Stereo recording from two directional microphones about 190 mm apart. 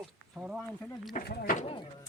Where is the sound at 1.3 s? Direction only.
50° left (ahead or behind).